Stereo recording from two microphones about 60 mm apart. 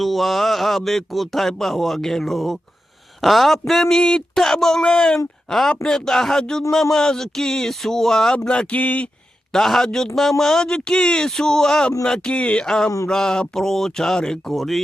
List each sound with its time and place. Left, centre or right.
0.0 s speech: centre
8.7 s speech: left
9.5 s speech: centre